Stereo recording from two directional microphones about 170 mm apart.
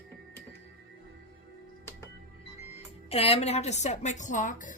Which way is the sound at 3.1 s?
35° left (ahead or behind).